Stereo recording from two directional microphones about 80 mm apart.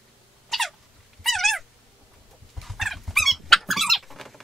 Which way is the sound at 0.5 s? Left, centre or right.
Centre.